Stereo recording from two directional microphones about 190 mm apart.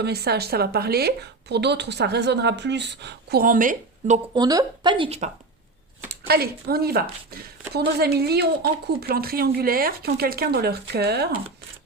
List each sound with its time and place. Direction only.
0.0 s speech: 55° right (ahead or behind); by 4.2 s 40° right (ahead or behind)
4.4 s speech: 20° right (ahead or behind)
6.1 s speech: 55° right (ahead or behind)